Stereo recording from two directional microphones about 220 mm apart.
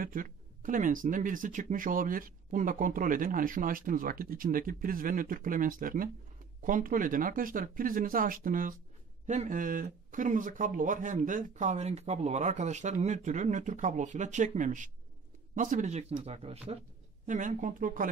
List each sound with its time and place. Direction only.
0.0 s speech: 40° right (ahead or behind)